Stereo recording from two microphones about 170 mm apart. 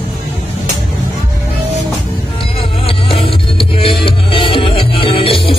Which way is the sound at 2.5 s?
35° left (ahead or behind).